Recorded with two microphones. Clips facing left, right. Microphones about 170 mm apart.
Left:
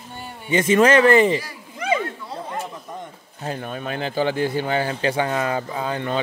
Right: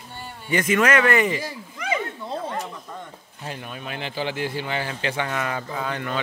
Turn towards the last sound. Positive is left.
turn(degrees=30)  # may be behind; listen again after turning